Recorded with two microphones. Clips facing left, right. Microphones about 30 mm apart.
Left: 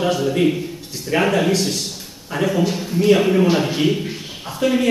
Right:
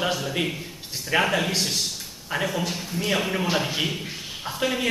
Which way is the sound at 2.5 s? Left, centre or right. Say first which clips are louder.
Left 8 dB; centre.